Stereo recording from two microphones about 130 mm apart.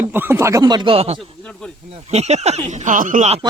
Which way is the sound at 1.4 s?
5° left (ahead or behind).